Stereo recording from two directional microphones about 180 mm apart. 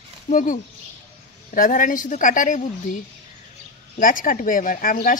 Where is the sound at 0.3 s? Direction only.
50° left (ahead or behind).